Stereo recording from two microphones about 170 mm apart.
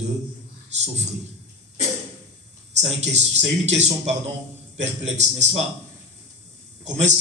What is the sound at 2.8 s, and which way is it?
Speech, 40° right (ahead or behind).